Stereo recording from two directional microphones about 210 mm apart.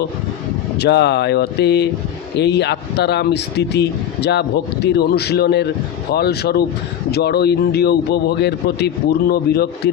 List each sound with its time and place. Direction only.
0.8 s speech: 55° left (ahead or behind)